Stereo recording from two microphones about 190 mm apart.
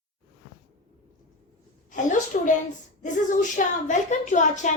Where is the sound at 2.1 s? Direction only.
40° left (ahead or behind).